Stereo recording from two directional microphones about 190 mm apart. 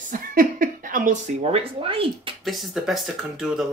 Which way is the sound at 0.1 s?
45° right (ahead or behind).